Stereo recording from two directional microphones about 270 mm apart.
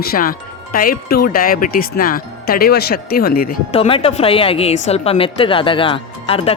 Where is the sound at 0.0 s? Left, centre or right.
Left.